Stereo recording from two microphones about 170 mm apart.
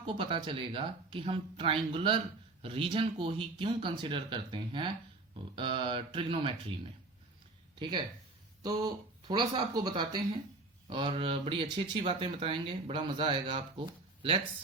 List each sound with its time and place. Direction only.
0.0 s speech: 30° right (ahead or behind)
7.8 s speech: 25° right (ahead or behind)